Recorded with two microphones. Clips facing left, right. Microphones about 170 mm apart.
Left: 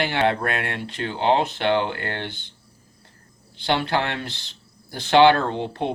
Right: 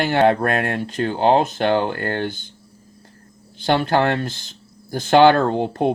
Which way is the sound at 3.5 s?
45° right (ahead or behind).